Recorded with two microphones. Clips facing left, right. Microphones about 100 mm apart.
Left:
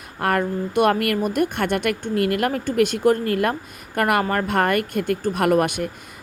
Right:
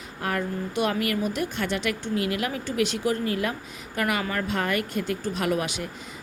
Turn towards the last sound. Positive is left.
turn(degrees=55)  # may be behind; listen again after turning